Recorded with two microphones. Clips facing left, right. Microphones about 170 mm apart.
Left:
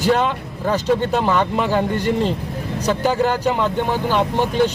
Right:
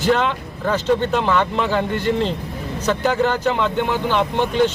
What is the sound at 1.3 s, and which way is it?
Speech, 15° left (ahead or behind).